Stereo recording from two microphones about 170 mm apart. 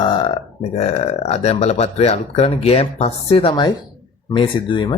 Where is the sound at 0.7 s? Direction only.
40° left (ahead or behind).